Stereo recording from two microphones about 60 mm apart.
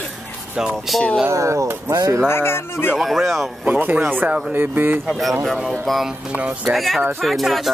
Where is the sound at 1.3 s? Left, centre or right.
Right.